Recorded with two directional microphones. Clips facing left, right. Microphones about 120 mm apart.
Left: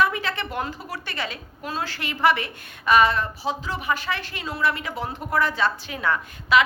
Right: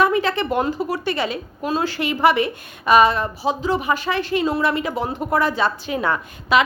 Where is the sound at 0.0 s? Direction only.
25° right (ahead or behind).